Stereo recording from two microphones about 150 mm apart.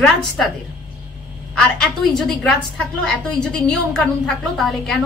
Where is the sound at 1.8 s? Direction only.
5° left (ahead or behind).